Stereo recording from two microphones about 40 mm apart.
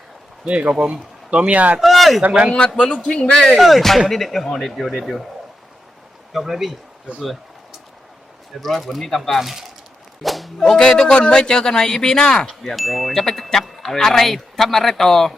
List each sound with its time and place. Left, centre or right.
0.4 s speech: right
1.8 s speech: centre
2.6 s speech: left
3.6 s speech: centre
6.3 s speech: centre
8.6 s speech: centre
10.8 s speech: centre
12.7 s speech: centre